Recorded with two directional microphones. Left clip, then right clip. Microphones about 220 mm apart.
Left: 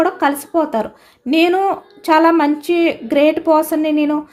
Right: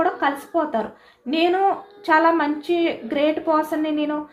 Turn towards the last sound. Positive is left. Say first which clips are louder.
# left 7 dB
turn(degrees=55)  # may be behind; listen again after turning